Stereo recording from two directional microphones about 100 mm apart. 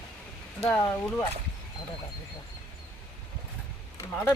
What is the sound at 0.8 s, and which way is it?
Speech, 25° left (ahead or behind).